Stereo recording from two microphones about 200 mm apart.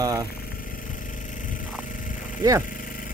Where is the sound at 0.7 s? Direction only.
40° left (ahead or behind).